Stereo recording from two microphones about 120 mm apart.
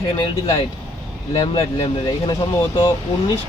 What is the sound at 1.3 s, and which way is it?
Speech, 45° left (ahead or behind).